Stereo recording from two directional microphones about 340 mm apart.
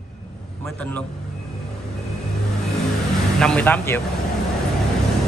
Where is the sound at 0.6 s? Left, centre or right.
Centre.